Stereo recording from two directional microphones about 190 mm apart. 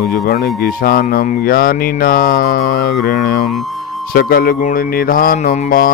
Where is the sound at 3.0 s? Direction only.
55° left (ahead or behind).